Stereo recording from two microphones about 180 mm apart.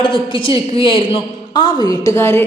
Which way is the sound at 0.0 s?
30° left (ahead or behind).